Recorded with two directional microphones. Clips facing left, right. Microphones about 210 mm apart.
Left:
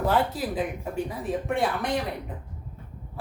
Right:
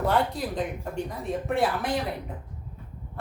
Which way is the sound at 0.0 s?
Centre (ahead or behind).